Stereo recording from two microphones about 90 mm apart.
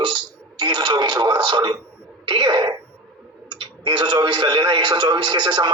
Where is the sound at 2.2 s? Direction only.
60° right (ahead or behind).